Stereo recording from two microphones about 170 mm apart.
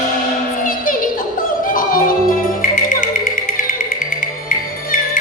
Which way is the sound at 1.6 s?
55° left (ahead or behind).